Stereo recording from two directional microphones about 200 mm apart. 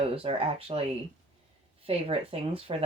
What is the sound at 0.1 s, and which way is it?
Speech, 30° right (ahead or behind).